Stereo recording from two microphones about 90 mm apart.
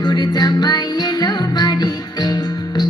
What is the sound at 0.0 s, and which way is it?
Music, 50° left (ahead or behind).